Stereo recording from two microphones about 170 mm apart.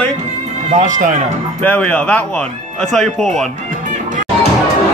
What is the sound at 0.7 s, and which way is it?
Speech, 50° right (ahead or behind).